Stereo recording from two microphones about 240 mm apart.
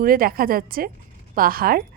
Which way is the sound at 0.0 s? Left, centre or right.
Right.